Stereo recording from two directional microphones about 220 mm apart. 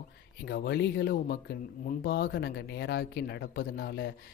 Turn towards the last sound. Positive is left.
turn(degrees=45)  # may be behind; listen again after turning